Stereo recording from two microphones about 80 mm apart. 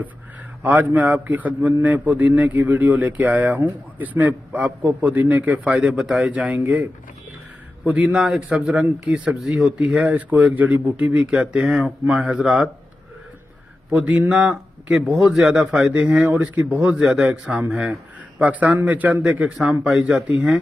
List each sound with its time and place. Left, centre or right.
0.6 s a man's voice: right
8.1 s speech: centre
9.8 s speech: centre
11.3 s speech: centre
13.8 s a man's voice: centre